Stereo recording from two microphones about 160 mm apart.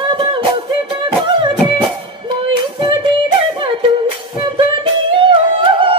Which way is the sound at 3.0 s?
35° right (ahead or behind).